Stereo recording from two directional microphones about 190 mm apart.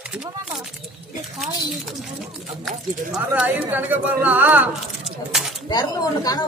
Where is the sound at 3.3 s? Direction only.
10° right (ahead or behind).